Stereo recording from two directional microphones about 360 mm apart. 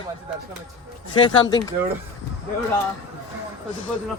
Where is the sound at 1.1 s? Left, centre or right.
Centre.